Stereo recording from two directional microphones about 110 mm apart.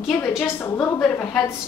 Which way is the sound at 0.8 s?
10° left (ahead or behind).